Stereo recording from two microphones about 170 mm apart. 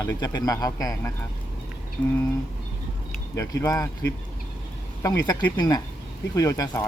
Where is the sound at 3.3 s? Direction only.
20° left (ahead or behind).